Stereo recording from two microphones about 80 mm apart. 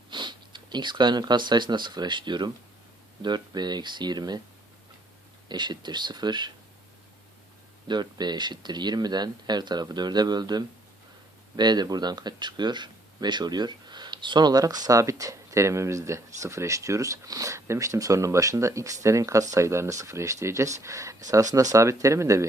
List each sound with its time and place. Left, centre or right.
0.1 s speech: right
5.5 s speech: right
7.9 s speech: right